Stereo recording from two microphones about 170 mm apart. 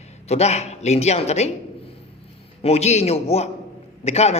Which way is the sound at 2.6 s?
40° left (ahead or behind).